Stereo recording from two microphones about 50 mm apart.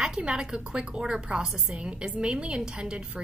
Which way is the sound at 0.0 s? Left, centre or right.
Centre.